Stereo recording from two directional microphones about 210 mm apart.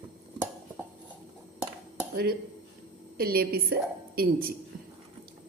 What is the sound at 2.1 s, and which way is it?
A woman's voice, 45° right (ahead or behind).